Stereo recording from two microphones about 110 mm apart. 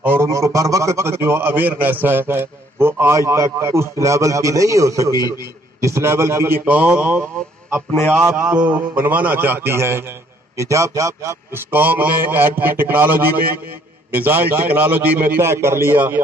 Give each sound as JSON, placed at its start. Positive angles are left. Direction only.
{"t": 0.0, "sound": "a man's voice", "side_deg": -20}
{"t": 8.5, "sound": "a man's voice", "side_deg": -10}